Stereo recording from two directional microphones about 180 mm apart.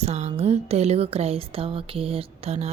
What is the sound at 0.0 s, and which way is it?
A woman's voice, 40° right (ahead or behind).